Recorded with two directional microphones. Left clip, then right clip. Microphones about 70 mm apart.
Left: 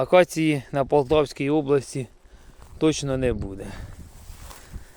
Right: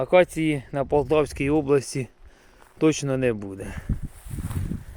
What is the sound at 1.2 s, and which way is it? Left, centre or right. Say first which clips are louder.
Speech: even; centre.